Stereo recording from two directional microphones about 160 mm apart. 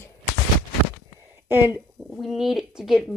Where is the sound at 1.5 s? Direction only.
15° right (ahead or behind).